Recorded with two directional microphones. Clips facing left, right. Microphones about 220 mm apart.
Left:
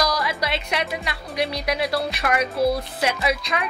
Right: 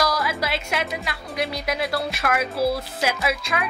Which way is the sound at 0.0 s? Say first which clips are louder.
Even; centre (ahead or behind).